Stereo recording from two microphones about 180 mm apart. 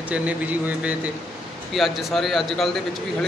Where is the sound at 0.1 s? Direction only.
10° right (ahead or behind).